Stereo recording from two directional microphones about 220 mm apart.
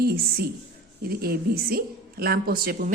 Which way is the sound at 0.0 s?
45° right (ahead or behind).